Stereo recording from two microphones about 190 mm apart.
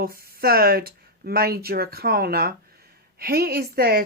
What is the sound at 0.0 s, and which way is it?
Speech, 50° right (ahead or behind).